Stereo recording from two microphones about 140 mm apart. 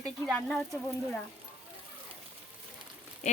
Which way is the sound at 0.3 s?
5° left (ahead or behind).